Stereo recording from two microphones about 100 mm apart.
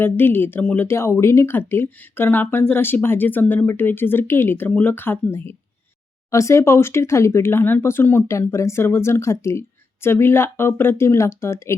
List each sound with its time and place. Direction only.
0.0 s speech: 20° left (ahead or behind)
0.9 s speech: 25° left (ahead or behind)